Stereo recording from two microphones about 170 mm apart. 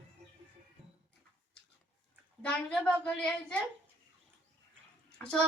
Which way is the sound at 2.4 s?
5° left (ahead or behind).